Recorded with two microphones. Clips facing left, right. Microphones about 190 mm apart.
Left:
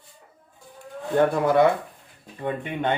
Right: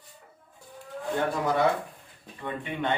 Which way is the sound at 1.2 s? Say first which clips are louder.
Left 8 dB; 55° left (ahead or behind).